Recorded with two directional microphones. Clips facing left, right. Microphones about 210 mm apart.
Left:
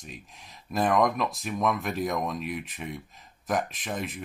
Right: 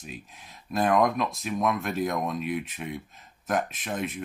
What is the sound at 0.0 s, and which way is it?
Speech, centre (ahead or behind).